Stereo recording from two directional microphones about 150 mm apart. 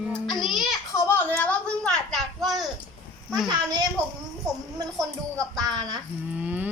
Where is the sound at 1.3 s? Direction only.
10° left (ahead or behind).